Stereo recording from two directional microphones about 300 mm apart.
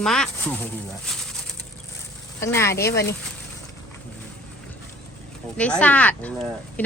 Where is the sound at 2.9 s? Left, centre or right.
Left.